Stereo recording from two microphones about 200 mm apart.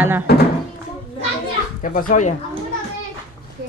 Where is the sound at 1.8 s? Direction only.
40° left (ahead or behind).